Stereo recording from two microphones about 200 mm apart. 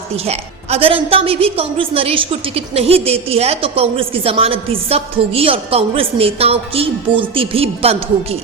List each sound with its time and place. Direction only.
0.3 s a woman's voice: 30° right (ahead or behind)